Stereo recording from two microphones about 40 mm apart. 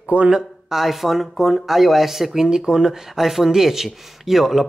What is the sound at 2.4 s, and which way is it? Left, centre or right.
Speech, centre.